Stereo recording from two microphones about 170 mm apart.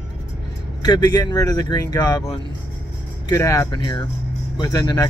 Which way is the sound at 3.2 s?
20° left (ahead or behind).